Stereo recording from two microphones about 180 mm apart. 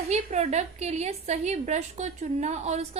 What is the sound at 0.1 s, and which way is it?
A woman's voice, 40° right (ahead or behind).